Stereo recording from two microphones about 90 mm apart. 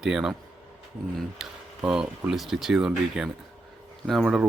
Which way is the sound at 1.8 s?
10° right (ahead or behind).